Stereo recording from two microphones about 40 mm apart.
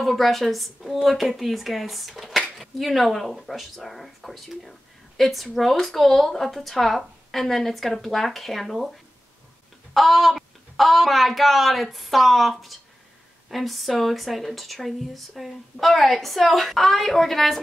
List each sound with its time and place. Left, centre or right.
0.0 s speech: centre
9.9 s speech: centre